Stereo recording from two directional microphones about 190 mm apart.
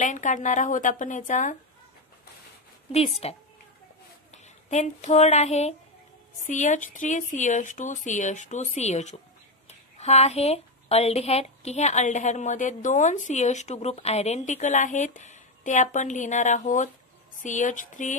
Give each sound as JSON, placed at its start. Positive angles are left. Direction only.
{"t": 0.0, "sound": "speech", "side_deg": 40}
{"t": 2.9, "sound": "a woman's voice", "side_deg": 30}